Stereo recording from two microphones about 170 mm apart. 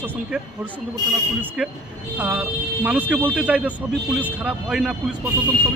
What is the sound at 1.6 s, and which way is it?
A man's voice, 10° right (ahead or behind).